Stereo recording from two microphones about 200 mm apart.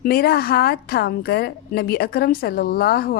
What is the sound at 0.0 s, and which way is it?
A woman's voice, 50° left (ahead or behind).